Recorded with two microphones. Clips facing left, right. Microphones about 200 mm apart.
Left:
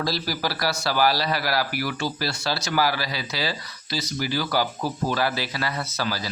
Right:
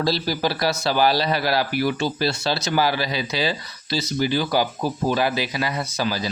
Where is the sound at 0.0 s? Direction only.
25° right (ahead or behind).